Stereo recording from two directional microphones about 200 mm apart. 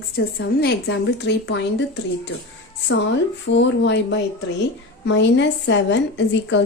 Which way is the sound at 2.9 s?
65° left (ahead or behind).